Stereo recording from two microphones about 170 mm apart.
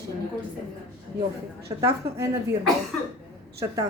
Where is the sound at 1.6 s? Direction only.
20° right (ahead or behind).